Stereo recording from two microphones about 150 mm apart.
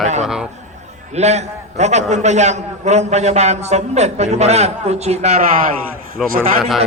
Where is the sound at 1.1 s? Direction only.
50° right (ahead or behind).